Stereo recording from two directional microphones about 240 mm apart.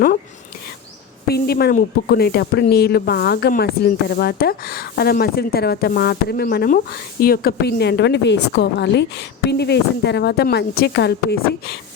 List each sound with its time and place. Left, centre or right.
1.3 s speech: left